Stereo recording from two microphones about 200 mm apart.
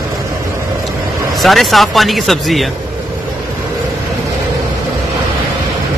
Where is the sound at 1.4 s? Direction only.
Centre (ahead or behind).